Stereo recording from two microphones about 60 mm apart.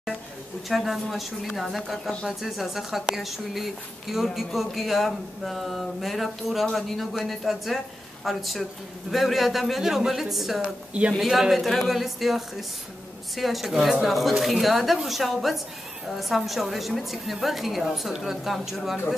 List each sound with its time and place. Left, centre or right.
0.7 s a woman's voice: centre
10.6 s speech: centre
11.1 s a woman's voice: centre